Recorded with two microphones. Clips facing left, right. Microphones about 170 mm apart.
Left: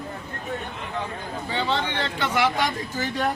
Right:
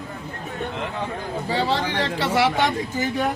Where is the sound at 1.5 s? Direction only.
35° right (ahead or behind).